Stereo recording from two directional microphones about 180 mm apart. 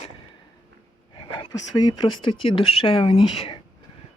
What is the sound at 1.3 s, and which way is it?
Speech, 25° left (ahead or behind).